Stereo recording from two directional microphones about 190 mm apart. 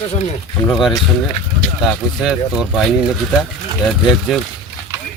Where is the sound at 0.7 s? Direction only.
Centre (ahead or behind).